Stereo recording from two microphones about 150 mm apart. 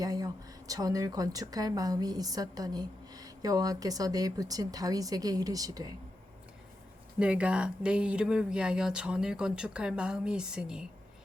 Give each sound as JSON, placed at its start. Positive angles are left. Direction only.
{"t": 0.0, "sound": "a sound", "side_deg": -25}
{"t": 0.7, "sound": "a woman's voice", "side_deg": -25}
{"t": 7.2, "sound": "speech", "side_deg": -10}